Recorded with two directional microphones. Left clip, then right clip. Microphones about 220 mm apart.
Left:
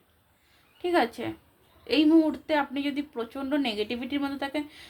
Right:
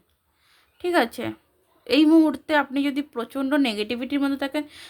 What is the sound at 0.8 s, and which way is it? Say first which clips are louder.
Speech: right 3 dB; 50° right (ahead or behind).